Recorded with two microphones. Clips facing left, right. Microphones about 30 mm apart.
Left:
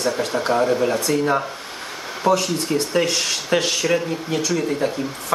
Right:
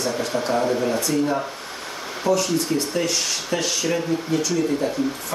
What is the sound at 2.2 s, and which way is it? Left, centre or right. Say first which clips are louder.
Speech: left 2 dB; left.